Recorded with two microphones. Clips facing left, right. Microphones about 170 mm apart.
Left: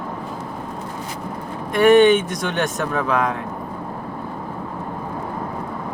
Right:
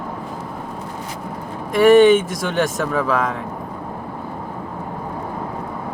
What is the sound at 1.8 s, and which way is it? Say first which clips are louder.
Speech: right 2 dB; 20° left (ahead or behind).